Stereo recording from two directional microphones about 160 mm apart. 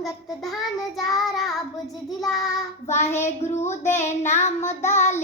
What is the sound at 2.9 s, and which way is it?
Child singing, 45° left (ahead or behind).